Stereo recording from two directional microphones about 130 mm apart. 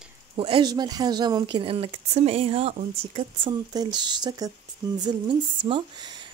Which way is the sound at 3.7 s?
30° right (ahead or behind).